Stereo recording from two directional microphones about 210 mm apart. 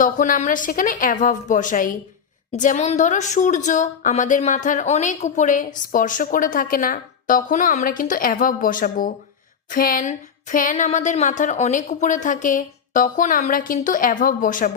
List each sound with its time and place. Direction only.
0.0 s a woman's voice: 40° left (ahead or behind)